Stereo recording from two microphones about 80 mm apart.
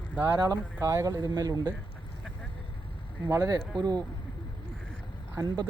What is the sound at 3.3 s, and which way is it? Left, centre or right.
Speech, right.